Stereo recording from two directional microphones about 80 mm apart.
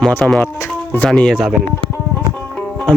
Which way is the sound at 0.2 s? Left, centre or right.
Centre.